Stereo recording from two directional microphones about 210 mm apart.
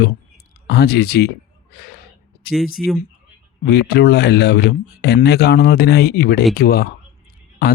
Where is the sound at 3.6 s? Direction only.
50° left (ahead or behind).